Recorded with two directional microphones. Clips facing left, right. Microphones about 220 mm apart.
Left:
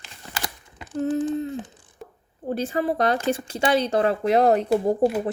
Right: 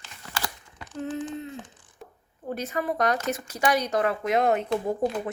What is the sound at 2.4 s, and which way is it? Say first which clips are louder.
Speech: left 5 dB; 30° left (ahead or behind).